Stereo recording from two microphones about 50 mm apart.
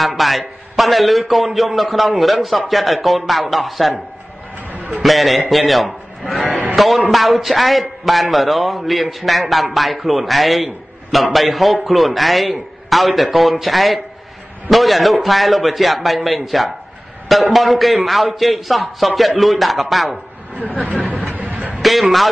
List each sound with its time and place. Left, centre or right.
0.0 s a man's voice: centre
5.0 s a man's voice: centre
20.8 s speech: right
21.2 s a sound: right
21.8 s a man's voice: centre